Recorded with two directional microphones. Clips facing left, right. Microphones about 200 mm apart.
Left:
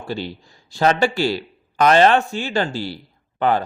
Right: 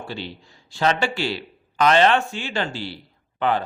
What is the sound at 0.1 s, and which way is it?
A man's voice, 40° left (ahead or behind).